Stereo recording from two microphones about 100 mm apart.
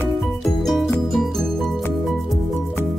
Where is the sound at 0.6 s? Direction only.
Centre (ahead or behind).